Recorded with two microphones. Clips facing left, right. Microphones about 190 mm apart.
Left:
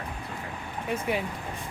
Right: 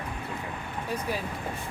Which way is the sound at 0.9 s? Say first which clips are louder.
Left 3 dB; 25° left (ahead or behind).